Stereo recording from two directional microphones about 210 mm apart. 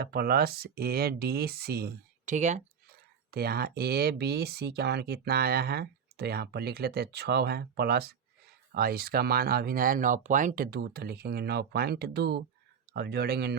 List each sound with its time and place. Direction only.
0.0 s speech: 50° right (ahead or behind)
3.3 s speech: 50° right (ahead or behind)